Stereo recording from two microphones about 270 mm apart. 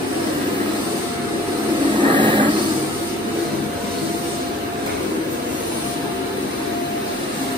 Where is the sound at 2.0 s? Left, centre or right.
Centre.